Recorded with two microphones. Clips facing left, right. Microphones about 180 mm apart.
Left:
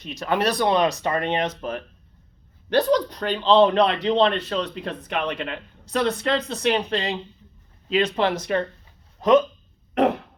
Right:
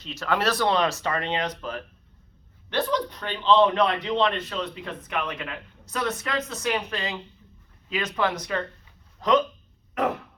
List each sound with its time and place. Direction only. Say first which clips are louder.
0.0 s speech: left 2 dB; 20° left (ahead or behind)
2.6 s speech: left 6 dB; 35° left (ahead or behind)
9.9 s throat clearing: left 6 dB; 35° left (ahead or behind)